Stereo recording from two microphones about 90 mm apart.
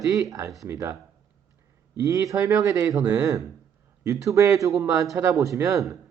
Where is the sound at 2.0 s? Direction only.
40° right (ahead or behind).